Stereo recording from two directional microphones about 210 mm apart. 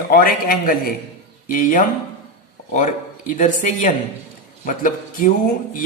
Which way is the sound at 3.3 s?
40° left (ahead or behind).